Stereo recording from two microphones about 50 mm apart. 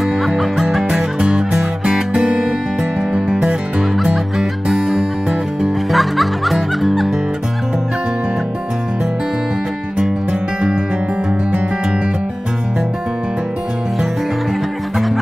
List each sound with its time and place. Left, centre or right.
0.3 s music: centre
3.3 s music: centre
4.0 s music: centre